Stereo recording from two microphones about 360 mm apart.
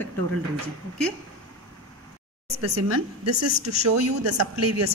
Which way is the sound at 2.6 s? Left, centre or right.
Right.